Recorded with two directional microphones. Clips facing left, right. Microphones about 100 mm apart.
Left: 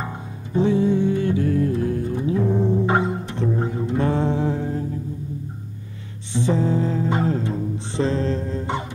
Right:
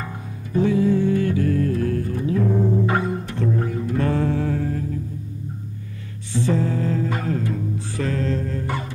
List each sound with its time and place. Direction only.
0.0 s music: 25° left (ahead or behind)
6.3 s music: 20° left (ahead or behind)